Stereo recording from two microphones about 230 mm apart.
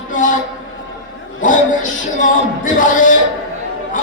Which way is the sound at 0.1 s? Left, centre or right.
Left.